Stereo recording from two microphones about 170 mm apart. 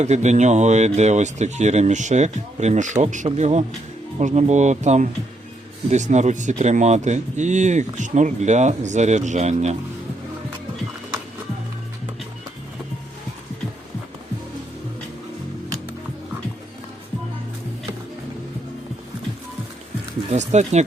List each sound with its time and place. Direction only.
0.0 s speech: 45° right (ahead or behind)
20.3 s speech: 40° right (ahead or behind)